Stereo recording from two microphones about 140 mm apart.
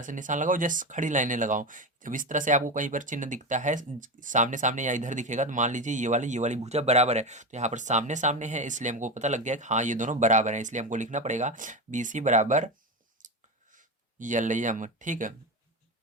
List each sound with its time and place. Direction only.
0.0 s speech: 65° right (ahead or behind)
13.2 s clicking: 70° right (ahead or behind)
13.7 s speech: 65° right (ahead or behind)